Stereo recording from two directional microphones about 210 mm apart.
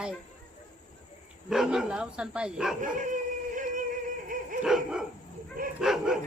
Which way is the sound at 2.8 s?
40° right (ahead or behind).